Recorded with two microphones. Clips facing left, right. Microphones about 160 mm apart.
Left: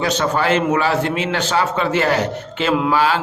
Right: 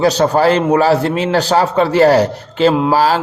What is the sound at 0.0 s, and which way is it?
A man's voice, 35° right (ahead or behind).